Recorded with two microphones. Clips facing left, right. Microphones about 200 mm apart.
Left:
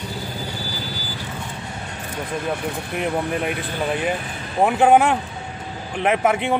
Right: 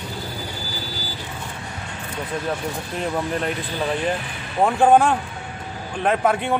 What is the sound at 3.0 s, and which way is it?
Speech, 10° left (ahead or behind).